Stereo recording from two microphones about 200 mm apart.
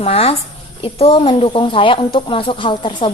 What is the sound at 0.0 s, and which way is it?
A woman's voice, 30° left (ahead or behind).